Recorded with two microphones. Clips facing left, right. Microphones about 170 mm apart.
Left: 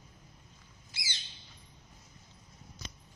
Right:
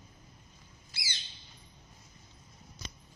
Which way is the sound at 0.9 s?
20° left (ahead or behind).